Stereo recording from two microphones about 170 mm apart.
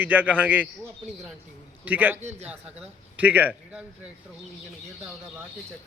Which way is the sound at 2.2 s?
40° right (ahead or behind).